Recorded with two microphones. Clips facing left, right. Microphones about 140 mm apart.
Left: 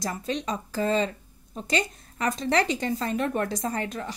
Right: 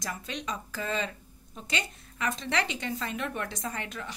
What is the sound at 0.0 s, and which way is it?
Speech, 35° left (ahead or behind).